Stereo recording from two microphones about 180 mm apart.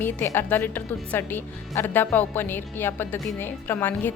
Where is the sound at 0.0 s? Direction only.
10° left (ahead or behind).